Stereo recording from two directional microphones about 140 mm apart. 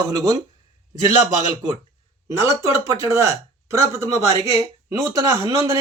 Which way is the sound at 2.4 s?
20° right (ahead or behind).